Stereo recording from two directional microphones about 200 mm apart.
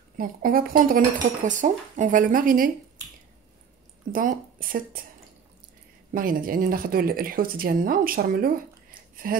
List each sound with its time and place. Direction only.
0.2 s speech: 45° right (ahead or behind)
4.1 s speech: 45° right (ahead or behind)
6.1 s speech: 45° right (ahead or behind)
9.1 s gasp: 45° right (ahead or behind)